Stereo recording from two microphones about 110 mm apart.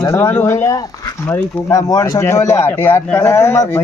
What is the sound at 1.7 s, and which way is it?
Speech, 30° left (ahead or behind).